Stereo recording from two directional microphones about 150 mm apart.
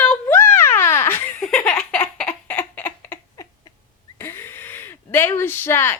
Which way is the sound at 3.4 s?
20° left (ahead or behind).